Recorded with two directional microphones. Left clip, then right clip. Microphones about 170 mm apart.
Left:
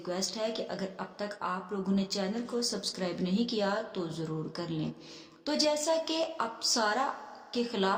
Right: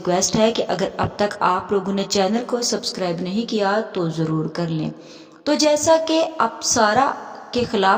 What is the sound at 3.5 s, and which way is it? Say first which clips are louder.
Speech: right 12 dB; 45° right (ahead or behind).